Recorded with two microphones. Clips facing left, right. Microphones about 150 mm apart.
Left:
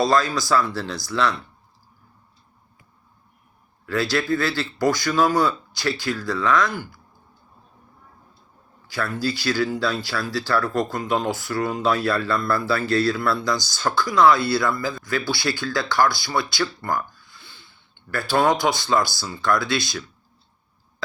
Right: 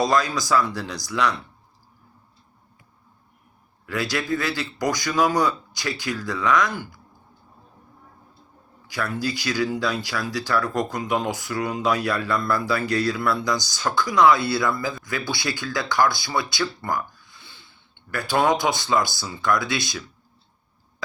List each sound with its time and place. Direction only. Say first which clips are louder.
0.0 s speech: left 1 dB; 20° right (ahead or behind)
3.8 s a man's voice: left 3 dB; 15° right (ahead or behind)
8.9 s a man's voice: left 1 dB; 20° right (ahead or behind)
17.4 s a sound: even; 20° right (ahead or behind)
18.1 s a man's voice: left 1 dB; 20° right (ahead or behind)